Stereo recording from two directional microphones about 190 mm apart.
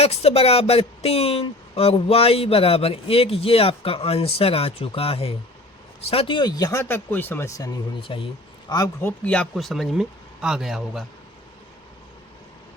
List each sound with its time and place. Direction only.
0.0 s speech: 35° left (ahead or behind)
8.7 s speech: 15° left (ahead or behind); by 11.0 s centre (ahead or behind)